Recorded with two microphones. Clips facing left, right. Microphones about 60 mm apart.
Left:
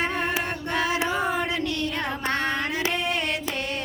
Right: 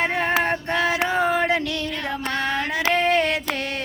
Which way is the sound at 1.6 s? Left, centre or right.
Left.